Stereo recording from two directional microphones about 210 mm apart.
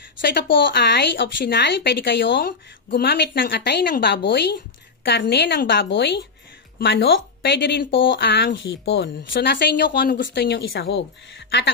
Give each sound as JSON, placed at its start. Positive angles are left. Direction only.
{"t": 0.2, "sound": "speech", "side_deg": 55}